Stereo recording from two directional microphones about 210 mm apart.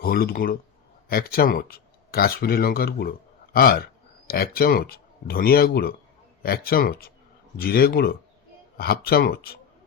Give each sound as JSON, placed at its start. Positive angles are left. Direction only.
{"t": 0.0, "sound": "speech", "side_deg": 45}